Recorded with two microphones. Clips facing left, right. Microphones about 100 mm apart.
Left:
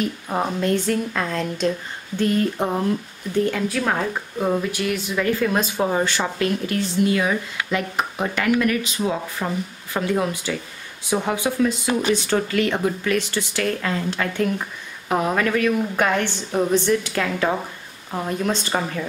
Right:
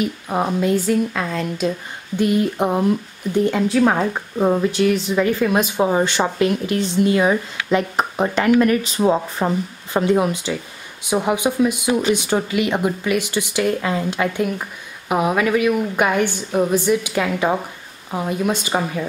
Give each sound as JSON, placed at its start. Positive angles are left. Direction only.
{"t": 0.0, "sound": "a woman's voice", "side_deg": -10}
{"t": 2.1, "sound": "speech", "side_deg": -15}
{"t": 9.9, "sound": "speech", "side_deg": -20}